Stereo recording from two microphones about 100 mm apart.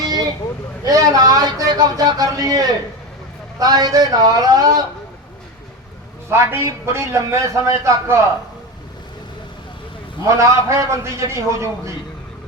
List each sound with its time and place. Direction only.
0.9 s a man's voice: 40° right (ahead or behind)
6.2 s a man's voice: 25° right (ahead or behind)
10.2 s a man's voice: 30° right (ahead or behind)